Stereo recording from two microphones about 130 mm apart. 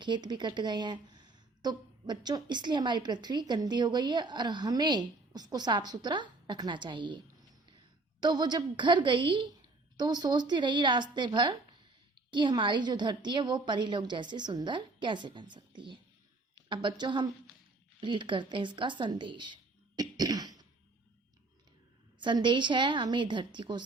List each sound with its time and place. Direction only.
0.0 s a woman's voice: 35° right (ahead or behind)
8.2 s a woman's voice: 35° right (ahead or behind)
20.0 s cough: 30° right (ahead or behind)
22.2 s a woman's voice: 35° right (ahead or behind)